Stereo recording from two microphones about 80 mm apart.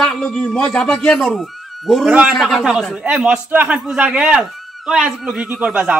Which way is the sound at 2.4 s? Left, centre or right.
Centre.